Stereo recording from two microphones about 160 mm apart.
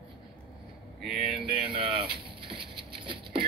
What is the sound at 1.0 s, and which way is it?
Speech, centre (ahead or behind).